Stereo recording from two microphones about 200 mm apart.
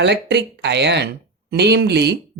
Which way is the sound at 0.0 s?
60° right (ahead or behind).